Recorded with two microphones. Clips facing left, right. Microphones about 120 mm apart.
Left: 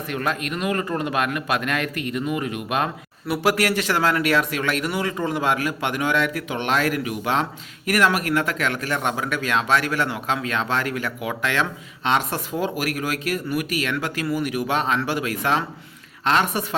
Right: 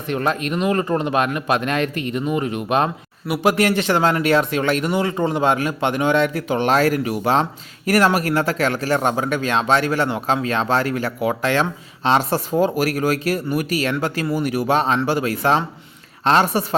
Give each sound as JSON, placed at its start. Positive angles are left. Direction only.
{"t": 0.1, "sound": "speech", "side_deg": -30}